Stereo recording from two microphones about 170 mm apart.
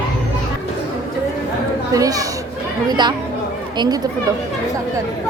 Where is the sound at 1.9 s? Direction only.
20° right (ahead or behind).